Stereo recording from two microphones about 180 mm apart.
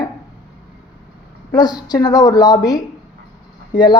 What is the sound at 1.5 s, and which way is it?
Speech, 20° left (ahead or behind).